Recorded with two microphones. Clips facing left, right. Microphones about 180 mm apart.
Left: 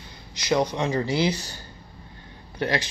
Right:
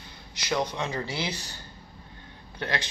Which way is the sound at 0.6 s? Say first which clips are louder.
Left 6 dB; 15° left (ahead or behind).